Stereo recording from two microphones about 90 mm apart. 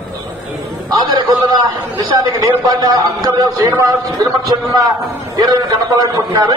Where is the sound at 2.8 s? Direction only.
45° right (ahead or behind).